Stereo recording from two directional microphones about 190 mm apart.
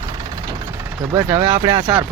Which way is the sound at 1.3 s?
35° right (ahead or behind).